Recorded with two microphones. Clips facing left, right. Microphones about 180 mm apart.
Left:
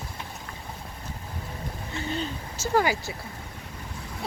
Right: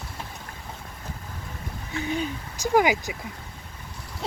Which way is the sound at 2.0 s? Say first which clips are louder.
Right 3 dB; 15° right (ahead or behind).